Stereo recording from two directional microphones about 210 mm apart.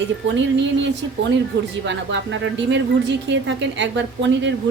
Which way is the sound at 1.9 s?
60° right (ahead or behind).